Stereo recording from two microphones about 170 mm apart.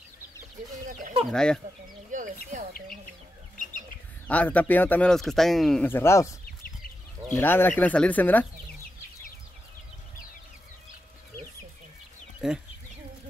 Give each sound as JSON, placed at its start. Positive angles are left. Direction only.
{"t": 0.8, "sound": "speech", "side_deg": -50}
{"t": 1.3, "sound": "speech", "side_deg": 5}
{"t": 2.1, "sound": "a sound", "side_deg": -50}
{"t": 4.3, "sound": "a man's voice", "side_deg": 10}
{"t": 6.4, "sound": "chicken", "side_deg": 55}
{"t": 7.2, "sound": "a man's voice", "side_deg": 10}
{"t": 12.4, "sound": "speech", "side_deg": -5}